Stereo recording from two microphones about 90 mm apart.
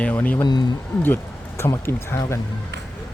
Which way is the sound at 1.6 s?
25° left (ahead or behind).